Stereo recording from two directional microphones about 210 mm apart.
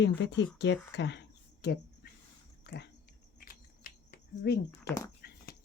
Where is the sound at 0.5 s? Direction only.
55° left (ahead or behind).